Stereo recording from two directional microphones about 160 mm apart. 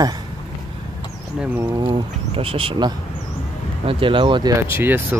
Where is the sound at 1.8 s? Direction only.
35° right (ahead or behind).